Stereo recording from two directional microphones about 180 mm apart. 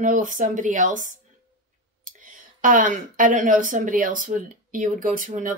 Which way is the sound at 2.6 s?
45° right (ahead or behind).